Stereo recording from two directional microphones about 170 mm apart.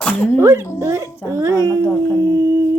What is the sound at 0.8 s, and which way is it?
Speech, 20° right (ahead or behind).